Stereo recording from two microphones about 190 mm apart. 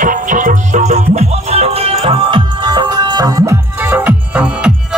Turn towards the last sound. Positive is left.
turn(degrees=-5)  # may be behind; listen again after turning